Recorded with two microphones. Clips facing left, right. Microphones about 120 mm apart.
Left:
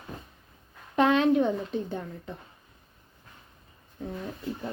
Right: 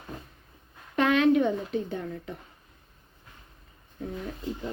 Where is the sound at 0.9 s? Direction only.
30° left (ahead or behind).